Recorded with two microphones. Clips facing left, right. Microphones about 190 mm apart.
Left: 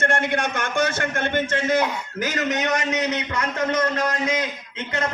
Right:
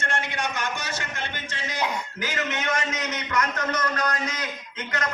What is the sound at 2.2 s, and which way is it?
Speech, 40° left (ahead or behind).